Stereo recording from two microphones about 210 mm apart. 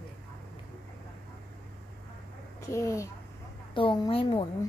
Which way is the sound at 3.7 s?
25° left (ahead or behind).